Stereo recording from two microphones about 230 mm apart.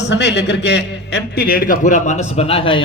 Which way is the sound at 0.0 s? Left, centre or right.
Left.